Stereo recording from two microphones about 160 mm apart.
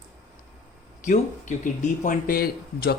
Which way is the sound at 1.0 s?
50° left (ahead or behind).